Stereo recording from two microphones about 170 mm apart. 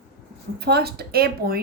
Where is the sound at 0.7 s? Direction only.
70° right (ahead or behind).